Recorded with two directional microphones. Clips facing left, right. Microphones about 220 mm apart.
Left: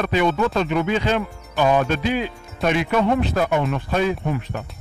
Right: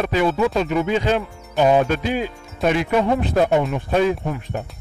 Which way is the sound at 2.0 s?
45° right (ahead or behind).